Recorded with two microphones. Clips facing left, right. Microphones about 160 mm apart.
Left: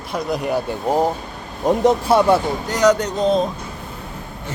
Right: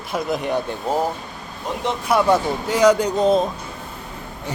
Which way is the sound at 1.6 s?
45° left (ahead or behind).